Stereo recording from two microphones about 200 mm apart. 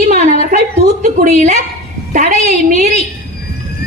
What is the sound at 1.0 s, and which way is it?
Speech, 35° right (ahead or behind).